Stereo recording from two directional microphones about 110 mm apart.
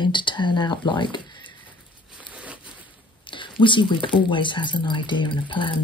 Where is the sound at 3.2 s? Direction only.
50° left (ahead or behind).